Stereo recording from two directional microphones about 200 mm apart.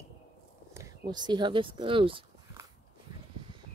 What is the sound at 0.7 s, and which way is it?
Speech, 15° right (ahead or behind).